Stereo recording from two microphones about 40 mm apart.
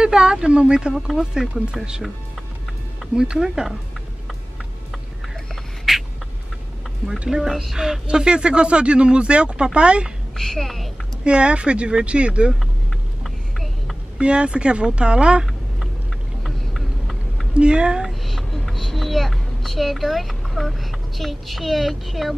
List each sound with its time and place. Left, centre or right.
0.0 s speech: right
0.9 s speech: centre
3.2 s speech: centre
5.9 s a sound: centre
7.2 s speech: centre
10.3 s a woman's voice: centre
11.2 s speech: right
13.2 s vehicle: centre
14.2 s speech: right
16.4 s a sound: centre
17.6 s speech: right
18.0 s a child's voice: centre